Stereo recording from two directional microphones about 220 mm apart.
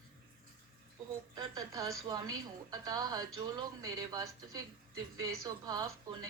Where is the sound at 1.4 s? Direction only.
15° right (ahead or behind).